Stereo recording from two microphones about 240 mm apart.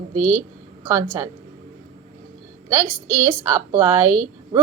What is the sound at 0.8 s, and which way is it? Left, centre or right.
Speech, centre.